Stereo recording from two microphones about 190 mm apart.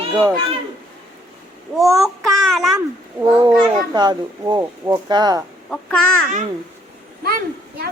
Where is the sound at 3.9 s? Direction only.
20° right (ahead or behind).